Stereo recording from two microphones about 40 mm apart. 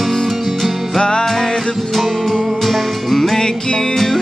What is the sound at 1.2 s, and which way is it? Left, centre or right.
Music, centre.